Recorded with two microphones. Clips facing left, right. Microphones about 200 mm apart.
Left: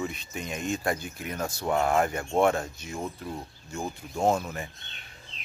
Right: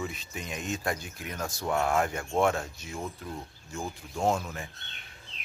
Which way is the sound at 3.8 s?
15° left (ahead or behind).